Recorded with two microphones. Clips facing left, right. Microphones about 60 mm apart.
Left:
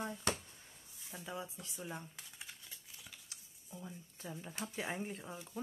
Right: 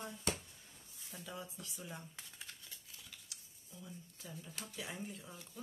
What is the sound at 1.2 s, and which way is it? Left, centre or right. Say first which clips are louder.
Speech: left 3 dB; left.